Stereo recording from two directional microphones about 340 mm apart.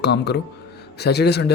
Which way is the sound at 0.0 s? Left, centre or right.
Left.